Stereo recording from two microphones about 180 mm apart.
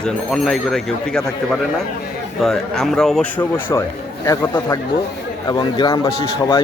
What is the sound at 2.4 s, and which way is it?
A man's voice, centre (ahead or behind).